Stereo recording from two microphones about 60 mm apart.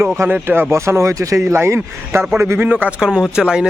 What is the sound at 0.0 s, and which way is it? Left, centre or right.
Speech, right.